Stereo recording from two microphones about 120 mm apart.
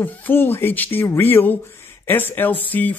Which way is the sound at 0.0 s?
15° left (ahead or behind).